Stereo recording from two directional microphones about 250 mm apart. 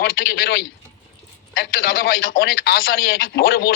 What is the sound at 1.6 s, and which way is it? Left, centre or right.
Speech, left.